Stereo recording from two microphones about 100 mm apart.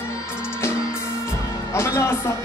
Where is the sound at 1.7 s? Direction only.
25° left (ahead or behind).